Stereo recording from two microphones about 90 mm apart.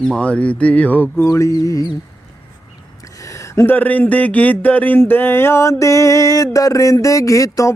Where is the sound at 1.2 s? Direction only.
35° left (ahead or behind).